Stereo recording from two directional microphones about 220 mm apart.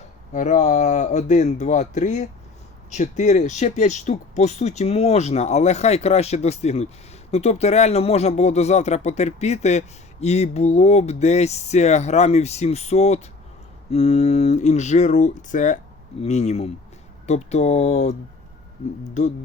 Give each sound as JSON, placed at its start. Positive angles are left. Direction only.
{"t": 0.3, "sound": "speech", "side_deg": 35}